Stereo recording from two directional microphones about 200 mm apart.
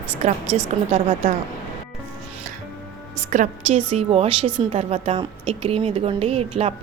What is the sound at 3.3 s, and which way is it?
A woman's voice, 40° right (ahead or behind).